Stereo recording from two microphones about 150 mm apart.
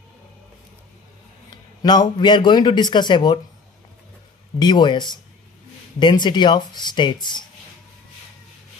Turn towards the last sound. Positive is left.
turn(degrees=30)  # may be behind; listen again after turning